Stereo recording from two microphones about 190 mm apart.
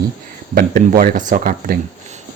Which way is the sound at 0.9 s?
45° right (ahead or behind).